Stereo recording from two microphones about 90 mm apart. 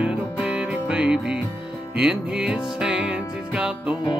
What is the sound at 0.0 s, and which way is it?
Music, 10° right (ahead or behind).